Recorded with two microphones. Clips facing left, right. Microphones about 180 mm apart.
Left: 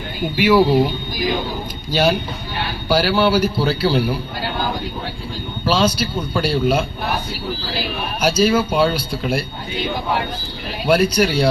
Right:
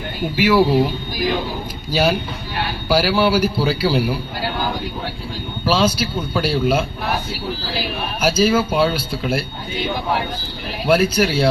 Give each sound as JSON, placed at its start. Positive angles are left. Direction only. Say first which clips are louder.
{"t": 0.2, "sound": "a man's voice", "louder": "left 1 dB", "side_deg": 0}
{"t": 5.6, "sound": "a man's voice", "louder": "even", "side_deg": -5}
{"t": 10.8, "sound": "a man's voice", "louder": "even", "side_deg": -5}